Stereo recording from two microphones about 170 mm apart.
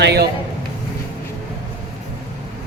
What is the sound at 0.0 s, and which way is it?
Speech, 75° right (ahead or behind).